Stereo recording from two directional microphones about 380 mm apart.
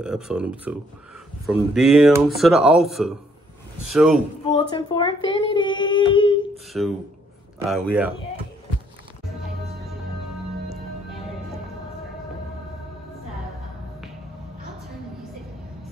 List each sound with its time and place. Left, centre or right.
0.0 s speech: centre
4.5 s speech: centre
6.7 s speech: centre